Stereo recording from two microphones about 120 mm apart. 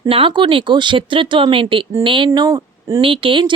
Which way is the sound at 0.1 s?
45° right (ahead or behind).